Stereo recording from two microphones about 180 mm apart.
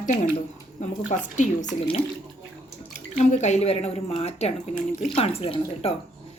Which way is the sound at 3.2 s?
40° left (ahead or behind).